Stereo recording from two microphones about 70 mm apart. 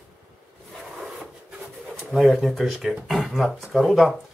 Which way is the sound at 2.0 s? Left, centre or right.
Centre.